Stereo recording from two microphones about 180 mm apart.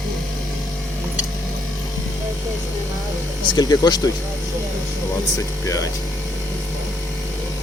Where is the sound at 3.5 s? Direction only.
20° left (ahead or behind).